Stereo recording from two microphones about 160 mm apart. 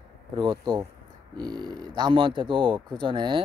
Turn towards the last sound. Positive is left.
turn(degrees=-30)  # may be behind; listen again after turning